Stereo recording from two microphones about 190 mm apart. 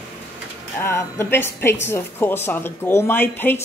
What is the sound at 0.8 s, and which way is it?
Speech, 15° left (ahead or behind).